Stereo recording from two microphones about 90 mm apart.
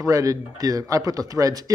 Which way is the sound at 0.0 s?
40° right (ahead or behind).